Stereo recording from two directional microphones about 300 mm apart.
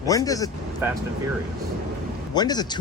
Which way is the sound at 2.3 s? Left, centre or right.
Centre.